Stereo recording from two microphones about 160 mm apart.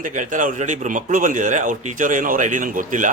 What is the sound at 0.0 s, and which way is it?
A man's voice, 55° right (ahead or behind).